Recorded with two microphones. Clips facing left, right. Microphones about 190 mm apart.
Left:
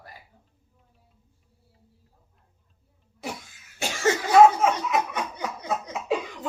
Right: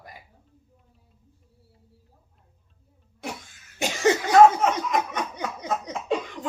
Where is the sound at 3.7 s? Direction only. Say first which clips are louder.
Right 3 dB; 20° right (ahead or behind).